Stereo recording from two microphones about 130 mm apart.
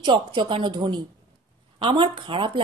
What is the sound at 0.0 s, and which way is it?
A woman's voice, 35° right (ahead or behind).